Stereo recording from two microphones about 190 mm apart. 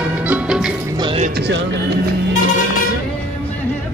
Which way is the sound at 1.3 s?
65° right (ahead or behind).